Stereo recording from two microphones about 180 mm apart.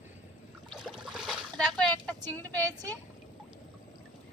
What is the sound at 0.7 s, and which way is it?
Boat, centre (ahead or behind).